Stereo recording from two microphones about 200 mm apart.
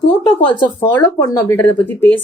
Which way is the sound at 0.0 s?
25° left (ahead or behind).